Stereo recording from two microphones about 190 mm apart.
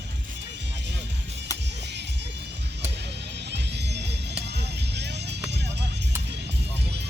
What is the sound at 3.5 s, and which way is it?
Music, 60° right (ahead or behind).